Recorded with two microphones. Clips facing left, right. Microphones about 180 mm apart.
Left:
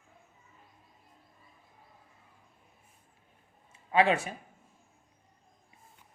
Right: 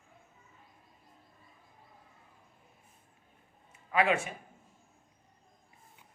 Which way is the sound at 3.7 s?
30° left (ahead or behind).